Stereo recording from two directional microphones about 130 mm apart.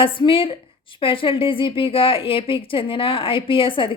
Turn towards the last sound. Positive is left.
turn(degrees=40)  # may be behind; listen again after turning